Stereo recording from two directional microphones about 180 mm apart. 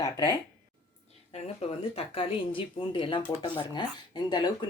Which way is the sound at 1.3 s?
35° left (ahead or behind).